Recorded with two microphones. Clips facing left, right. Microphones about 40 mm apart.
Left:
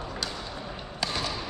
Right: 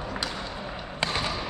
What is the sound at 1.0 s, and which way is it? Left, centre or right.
Basketball bounce, right.